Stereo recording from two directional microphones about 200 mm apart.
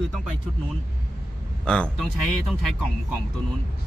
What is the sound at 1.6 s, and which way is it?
Speech, 5° left (ahead or behind).